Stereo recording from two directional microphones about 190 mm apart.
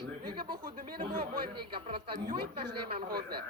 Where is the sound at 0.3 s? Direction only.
25° right (ahead or behind).